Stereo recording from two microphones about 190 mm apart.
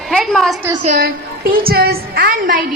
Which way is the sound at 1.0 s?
50° right (ahead or behind).